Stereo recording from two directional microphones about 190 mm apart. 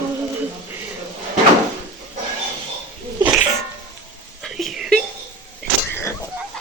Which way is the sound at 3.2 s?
10° right (ahead or behind).